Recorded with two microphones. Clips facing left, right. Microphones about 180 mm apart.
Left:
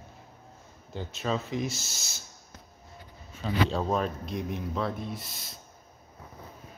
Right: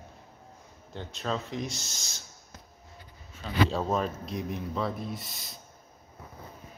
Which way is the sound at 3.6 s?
Centre (ahead or behind).